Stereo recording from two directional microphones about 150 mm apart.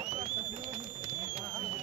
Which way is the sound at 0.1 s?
50° right (ahead or behind).